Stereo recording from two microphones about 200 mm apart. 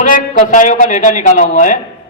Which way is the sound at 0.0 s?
40° left (ahead or behind).